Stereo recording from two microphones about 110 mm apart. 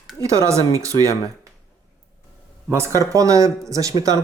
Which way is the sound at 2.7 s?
25° right (ahead or behind).